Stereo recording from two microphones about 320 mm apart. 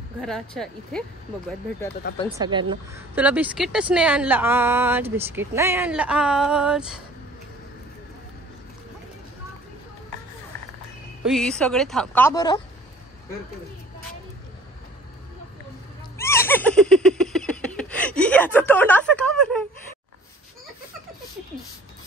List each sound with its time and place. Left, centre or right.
0.2 s a woman's voice: centre
2.2 s a woman's voice: centre
11.2 s a woman's voice: centre
16.2 s a sound: centre